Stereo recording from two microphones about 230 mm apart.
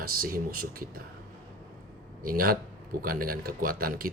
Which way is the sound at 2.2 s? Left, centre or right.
Right.